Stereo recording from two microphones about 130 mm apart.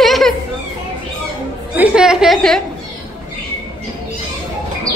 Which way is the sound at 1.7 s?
10° right (ahead or behind).